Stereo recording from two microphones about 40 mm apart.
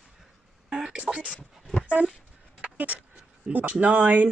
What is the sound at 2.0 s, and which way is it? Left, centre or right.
Speech, right.